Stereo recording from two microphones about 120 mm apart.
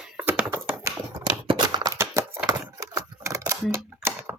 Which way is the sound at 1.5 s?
35° right (ahead or behind).